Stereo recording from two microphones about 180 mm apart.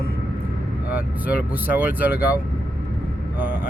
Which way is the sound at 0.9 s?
10° right (ahead or behind).